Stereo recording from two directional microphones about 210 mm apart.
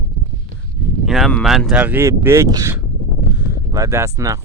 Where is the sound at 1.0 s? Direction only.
Centre (ahead or behind).